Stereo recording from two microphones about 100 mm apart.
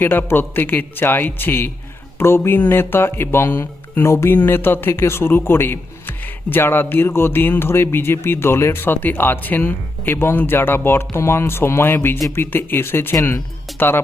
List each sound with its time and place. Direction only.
0.0 s speech: 20° left (ahead or behind)